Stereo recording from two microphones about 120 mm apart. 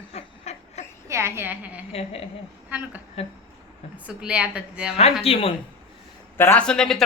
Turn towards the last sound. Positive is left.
turn(degrees=5)  # may be behind; listen again after turning